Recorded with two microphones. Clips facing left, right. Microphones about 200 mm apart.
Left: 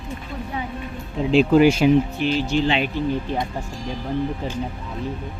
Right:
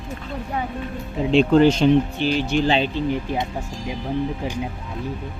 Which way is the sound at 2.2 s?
30° right (ahead or behind).